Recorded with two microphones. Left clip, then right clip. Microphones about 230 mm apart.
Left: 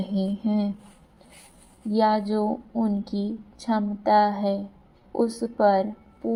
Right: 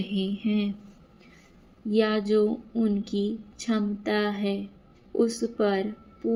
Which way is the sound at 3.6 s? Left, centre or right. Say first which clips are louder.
Left 4 dB; centre.